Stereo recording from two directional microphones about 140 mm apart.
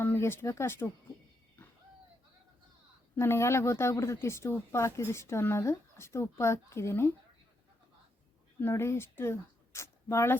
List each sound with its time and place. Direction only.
0.0 s speech: 15° left (ahead or behind)
3.2 s speech: 20° left (ahead or behind)
8.6 s speech: 20° left (ahead or behind)